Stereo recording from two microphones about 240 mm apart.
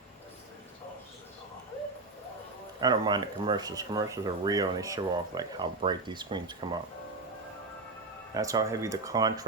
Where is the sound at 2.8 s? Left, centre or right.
Centre.